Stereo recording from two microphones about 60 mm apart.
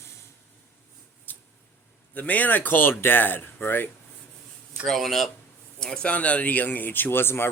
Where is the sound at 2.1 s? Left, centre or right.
Left.